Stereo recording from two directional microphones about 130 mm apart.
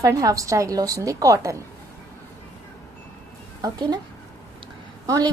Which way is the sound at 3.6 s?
30° right (ahead or behind).